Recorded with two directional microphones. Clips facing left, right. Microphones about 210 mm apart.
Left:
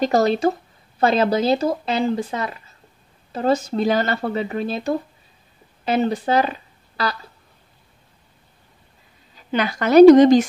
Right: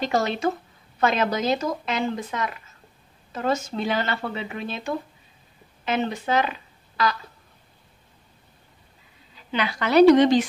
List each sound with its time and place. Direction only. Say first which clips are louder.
0.0 s speech: left 6 dB; 40° left (ahead or behind)
9.5 s speech: left 5 dB; 45° left (ahead or behind)